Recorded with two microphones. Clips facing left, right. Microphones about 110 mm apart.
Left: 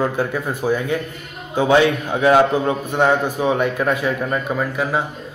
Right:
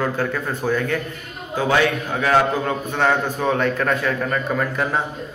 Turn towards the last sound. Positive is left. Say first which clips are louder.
# left 1 dB
turn(degrees=5)  # may be behind; listen again after turning